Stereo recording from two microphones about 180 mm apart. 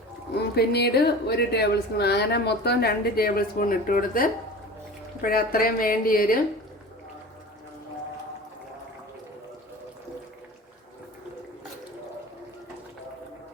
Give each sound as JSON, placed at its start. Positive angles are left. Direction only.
{"t": 0.3, "sound": "a woman's voice", "side_deg": 65}